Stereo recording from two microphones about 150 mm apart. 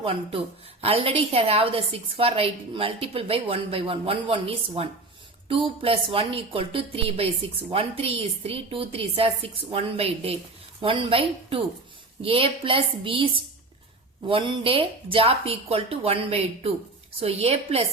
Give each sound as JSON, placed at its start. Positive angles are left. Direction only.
{"t": 0.0, "sound": "a woman's voice", "side_deg": -40}